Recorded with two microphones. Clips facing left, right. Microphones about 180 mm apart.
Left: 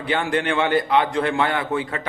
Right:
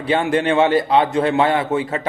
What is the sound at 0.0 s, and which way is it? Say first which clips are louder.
A man's voice: right 4 dB; 25° right (ahead or behind).